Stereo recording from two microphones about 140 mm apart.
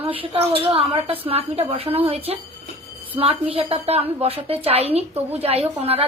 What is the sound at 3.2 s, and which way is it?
A woman's voice, 45° right (ahead or behind).